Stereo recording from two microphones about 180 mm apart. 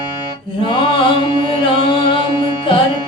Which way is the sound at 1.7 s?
30° left (ahead or behind).